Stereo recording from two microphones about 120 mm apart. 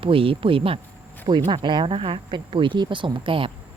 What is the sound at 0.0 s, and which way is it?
Speech, 50° right (ahead or behind).